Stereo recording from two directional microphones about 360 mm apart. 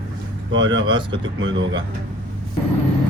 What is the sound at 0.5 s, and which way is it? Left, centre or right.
Speech, right.